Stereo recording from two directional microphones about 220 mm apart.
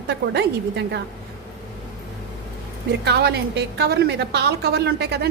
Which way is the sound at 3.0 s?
50° right (ahead or behind).